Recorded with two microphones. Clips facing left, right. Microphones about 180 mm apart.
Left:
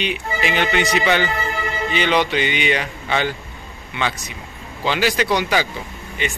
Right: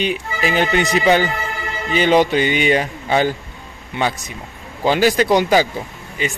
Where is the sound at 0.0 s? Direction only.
40° right (ahead or behind).